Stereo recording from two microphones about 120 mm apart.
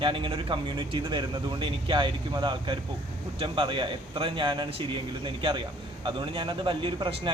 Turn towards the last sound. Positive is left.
turn(degrees=-45)  # may be behind; listen again after turning